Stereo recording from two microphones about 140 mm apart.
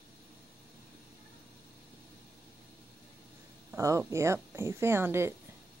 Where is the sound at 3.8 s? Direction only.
20° right (ahead or behind).